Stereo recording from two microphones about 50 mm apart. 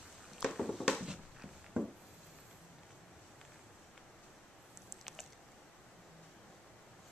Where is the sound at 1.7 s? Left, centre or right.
Right.